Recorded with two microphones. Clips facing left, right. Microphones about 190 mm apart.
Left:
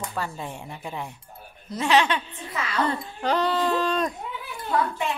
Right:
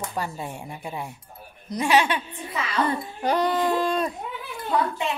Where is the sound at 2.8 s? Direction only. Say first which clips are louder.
Right 1 dB; 15° right (ahead or behind).